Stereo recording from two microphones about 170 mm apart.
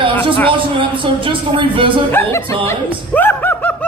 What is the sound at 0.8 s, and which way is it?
Speech, 30° right (ahead or behind).